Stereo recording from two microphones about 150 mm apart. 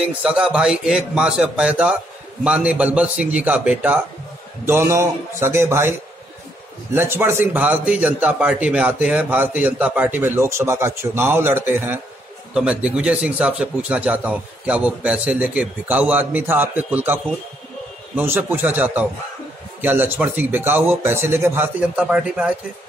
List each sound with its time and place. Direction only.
0.0 s a man's voice: 5° right (ahead or behind)